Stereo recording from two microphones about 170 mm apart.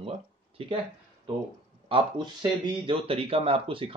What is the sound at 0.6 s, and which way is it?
Speech, 35° right (ahead or behind).